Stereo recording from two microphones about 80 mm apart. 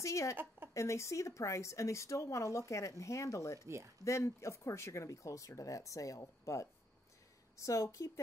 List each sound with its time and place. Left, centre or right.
0.0 s speech: left
3.6 s speech: right
4.0 s speech: left